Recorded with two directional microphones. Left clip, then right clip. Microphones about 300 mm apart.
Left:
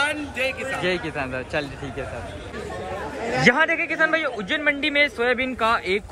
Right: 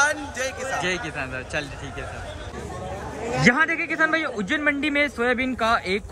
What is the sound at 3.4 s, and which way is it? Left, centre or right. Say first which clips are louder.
A man's voice: left 1 dB; centre.